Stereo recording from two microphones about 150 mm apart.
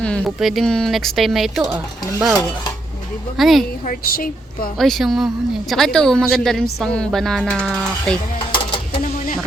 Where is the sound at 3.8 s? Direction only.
75° left (ahead or behind).